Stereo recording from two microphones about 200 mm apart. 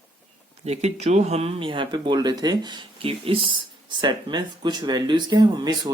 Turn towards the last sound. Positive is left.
turn(degrees=-20)  # may be behind; listen again after turning